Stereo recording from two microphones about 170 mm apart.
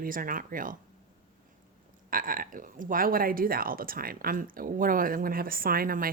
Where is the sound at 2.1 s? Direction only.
55° right (ahead or behind).